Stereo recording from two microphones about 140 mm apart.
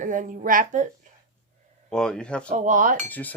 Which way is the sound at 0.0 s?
70° right (ahead or behind).